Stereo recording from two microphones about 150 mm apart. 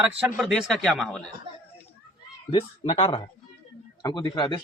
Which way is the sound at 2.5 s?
45° left (ahead or behind).